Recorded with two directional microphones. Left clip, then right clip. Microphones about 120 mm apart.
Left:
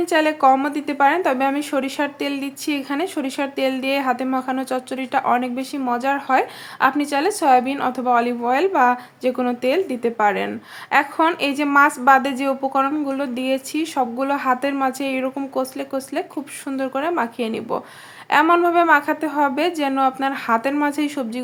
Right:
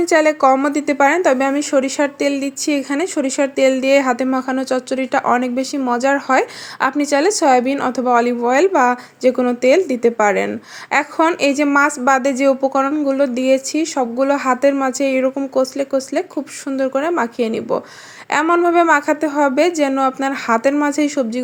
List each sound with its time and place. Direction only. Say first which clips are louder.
0.1 s speech: right 3 dB; 40° right (ahead or behind)